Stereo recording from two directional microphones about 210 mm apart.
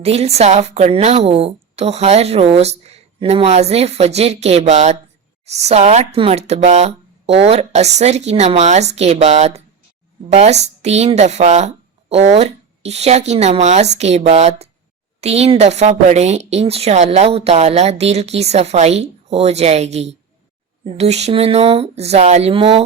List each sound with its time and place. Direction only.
0.0 s a woman's voice: 30° right (ahead or behind)